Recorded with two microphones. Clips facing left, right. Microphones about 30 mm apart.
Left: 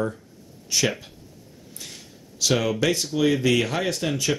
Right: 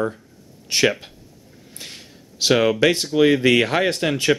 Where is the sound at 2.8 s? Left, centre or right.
Right.